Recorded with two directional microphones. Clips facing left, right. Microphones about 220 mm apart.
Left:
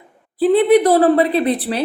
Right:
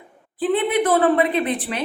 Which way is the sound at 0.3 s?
40° left (ahead or behind).